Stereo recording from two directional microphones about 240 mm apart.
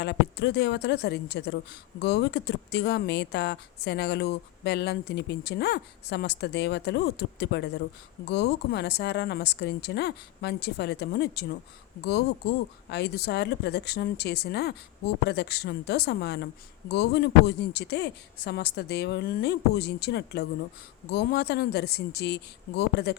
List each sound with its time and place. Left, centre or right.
0.0 s speech: left
12.9 s speech: left